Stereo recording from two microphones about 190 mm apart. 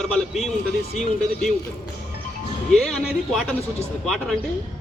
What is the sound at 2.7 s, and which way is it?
A man's voice, centre (ahead or behind).